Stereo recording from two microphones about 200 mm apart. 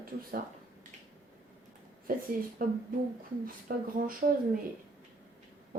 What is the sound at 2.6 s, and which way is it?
Speech, 45° right (ahead or behind).